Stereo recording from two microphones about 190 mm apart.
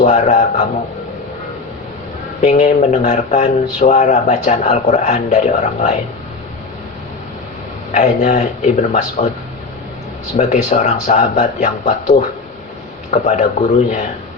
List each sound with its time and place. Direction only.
0.0 s speech: 40° left (ahead or behind)
2.4 s speech: 35° left (ahead or behind)
7.9 s speech: 40° left (ahead or behind)
10.3 s speech: 35° left (ahead or behind)